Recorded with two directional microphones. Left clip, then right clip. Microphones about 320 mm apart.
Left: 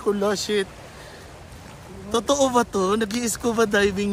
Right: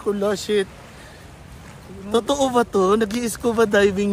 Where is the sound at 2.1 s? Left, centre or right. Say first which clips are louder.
Right 1 dB; centre.